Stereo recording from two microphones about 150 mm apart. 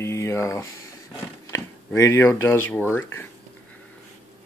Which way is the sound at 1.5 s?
20° left (ahead or behind).